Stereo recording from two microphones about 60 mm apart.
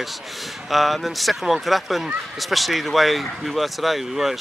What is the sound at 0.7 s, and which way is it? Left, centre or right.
Speech, centre.